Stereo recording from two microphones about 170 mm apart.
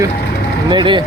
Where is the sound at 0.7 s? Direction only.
25° right (ahead or behind).